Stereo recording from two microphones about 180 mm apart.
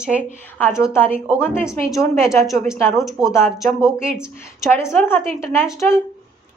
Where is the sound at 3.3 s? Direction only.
15° left (ahead or behind).